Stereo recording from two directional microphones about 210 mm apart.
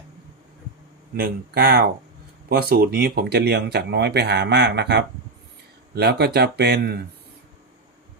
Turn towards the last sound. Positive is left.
turn(degrees=-50)  # may be behind; listen again after turning